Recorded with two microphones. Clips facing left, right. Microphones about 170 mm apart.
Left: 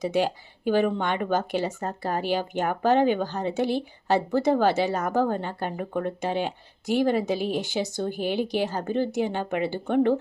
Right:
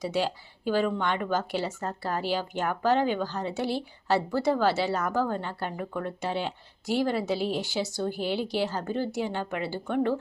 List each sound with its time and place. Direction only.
0.0 s a woman's voice: 20° left (ahead or behind)